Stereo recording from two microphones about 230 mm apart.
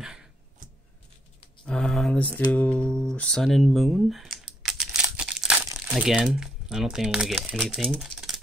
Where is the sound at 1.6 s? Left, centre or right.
Centre.